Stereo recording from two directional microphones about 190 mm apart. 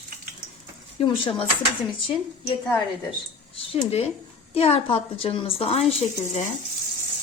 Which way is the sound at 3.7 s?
35° left (ahead or behind).